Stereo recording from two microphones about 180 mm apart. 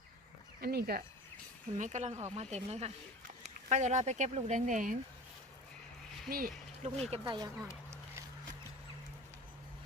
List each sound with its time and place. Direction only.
0.6 s speech: 60° right (ahead or behind)
6.2 s speech: 55° right (ahead or behind)
7.1 s speech: 25° right (ahead or behind)